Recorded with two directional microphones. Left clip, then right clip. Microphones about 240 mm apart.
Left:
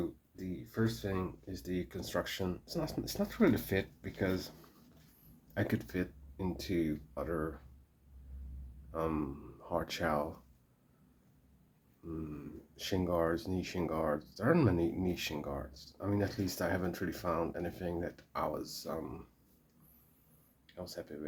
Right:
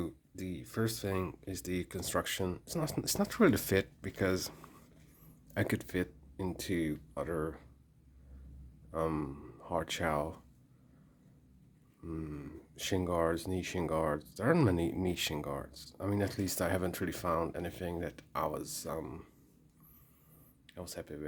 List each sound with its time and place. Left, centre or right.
0.3 s speech: right
5.5 s speech: right
8.9 s speech: right
12.0 s speech: right
20.7 s speech: right